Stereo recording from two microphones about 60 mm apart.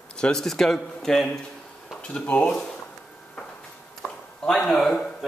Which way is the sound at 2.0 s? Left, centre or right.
Centre.